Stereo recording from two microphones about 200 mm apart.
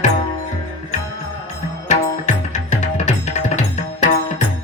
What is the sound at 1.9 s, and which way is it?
Music, 35° left (ahead or behind).